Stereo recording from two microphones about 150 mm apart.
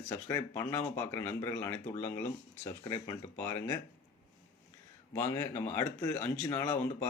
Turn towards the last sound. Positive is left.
turn(degrees=15)  # may be behind; listen again after turning